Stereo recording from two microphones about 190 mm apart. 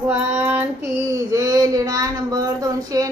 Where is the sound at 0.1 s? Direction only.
10° right (ahead or behind).